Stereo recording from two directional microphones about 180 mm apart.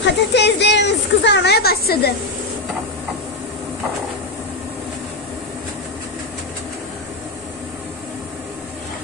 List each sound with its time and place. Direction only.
0.0 s speech: 70° left (ahead or behind)